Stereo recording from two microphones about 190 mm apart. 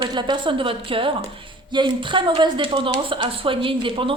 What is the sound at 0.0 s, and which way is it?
A woman's voice, 25° right (ahead or behind).